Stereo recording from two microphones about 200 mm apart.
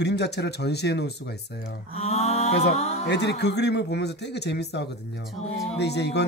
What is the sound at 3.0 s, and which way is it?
Speech, 60° left (ahead or behind).